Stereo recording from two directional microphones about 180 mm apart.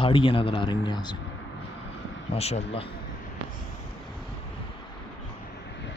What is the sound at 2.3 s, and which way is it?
Speech, 35° left (ahead or behind).